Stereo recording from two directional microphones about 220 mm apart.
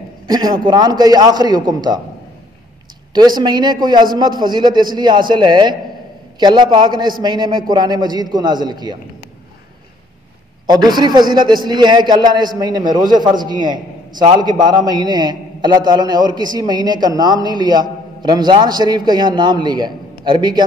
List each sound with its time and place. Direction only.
0.3 s a man's voice: 20° right (ahead or behind)
3.1 s a man's voice: 20° right (ahead or behind)
10.7 s a man's voice: 20° right (ahead or behind)